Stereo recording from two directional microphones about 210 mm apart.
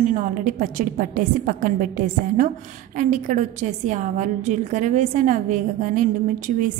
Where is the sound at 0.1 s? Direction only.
35° right (ahead or behind).